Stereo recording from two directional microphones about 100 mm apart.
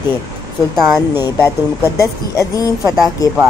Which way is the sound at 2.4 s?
40° left (ahead or behind).